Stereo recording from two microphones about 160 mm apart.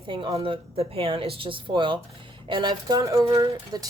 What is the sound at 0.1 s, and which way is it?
Speech, 30° right (ahead or behind).